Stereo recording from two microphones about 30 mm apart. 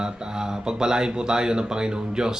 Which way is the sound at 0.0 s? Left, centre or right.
Right.